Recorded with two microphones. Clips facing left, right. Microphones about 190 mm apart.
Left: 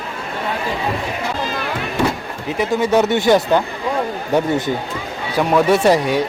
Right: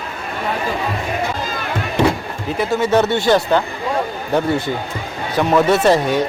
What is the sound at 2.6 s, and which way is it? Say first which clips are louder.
Speech: even; 15° left (ahead or behind).